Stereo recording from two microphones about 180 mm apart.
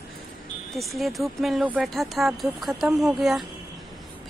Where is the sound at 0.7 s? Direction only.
Centre (ahead or behind).